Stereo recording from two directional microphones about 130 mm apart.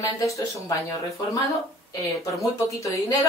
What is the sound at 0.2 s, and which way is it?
Speech, 25° left (ahead or behind).